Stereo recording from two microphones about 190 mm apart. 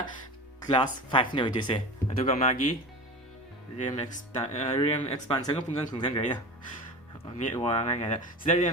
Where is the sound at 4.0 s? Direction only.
35° left (ahead or behind).